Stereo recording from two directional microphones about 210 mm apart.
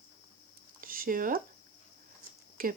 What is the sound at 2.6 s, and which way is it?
Speech, 45° right (ahead or behind).